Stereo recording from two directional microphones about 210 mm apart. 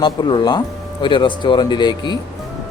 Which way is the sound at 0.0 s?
20° left (ahead or behind).